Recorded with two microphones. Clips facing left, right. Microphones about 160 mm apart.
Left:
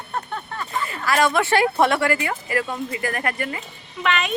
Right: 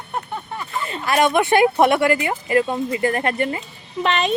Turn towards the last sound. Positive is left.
turn(degrees=-30)  # may be behind; listen again after turning